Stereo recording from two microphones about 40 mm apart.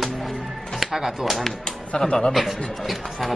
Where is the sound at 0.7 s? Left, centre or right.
Centre.